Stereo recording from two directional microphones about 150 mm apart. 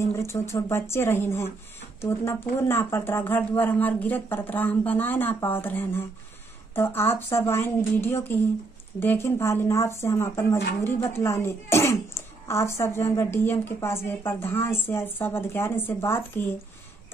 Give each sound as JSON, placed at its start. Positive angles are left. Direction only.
{"t": 0.0, "sound": "a child's voice", "side_deg": 20}